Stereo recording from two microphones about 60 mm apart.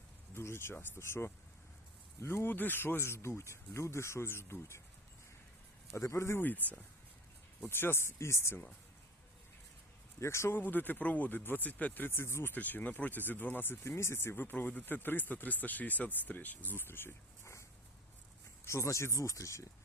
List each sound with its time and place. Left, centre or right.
0.3 s speech: left
5.9 s speech: left
6.6 s speech: left
7.6 s speech: left
10.2 s speech: left
10.5 s speech: left
12.5 s speech: left
13.8 s speech: left
14.3 s speech: left